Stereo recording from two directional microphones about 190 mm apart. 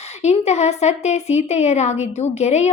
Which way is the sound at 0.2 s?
35° left (ahead or behind).